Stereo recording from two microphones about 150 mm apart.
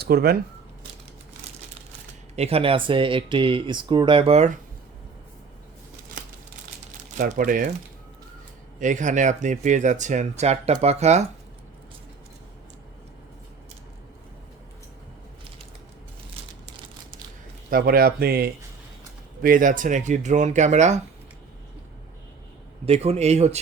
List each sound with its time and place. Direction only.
0.0 s speech: 90° right
2.3 s speech: 40° right (ahead or behind)
7.2 s speech: 60° right (ahead or behind)
8.8 s speech: 55° right (ahead or behind)
17.7 s speech: 75° right (ahead or behind)
19.4 s speech: 65° right (ahead or behind)
22.9 s speech: 45° right (ahead or behind)